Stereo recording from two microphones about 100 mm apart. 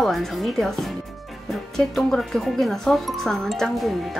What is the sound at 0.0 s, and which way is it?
Speech, centre (ahead or behind).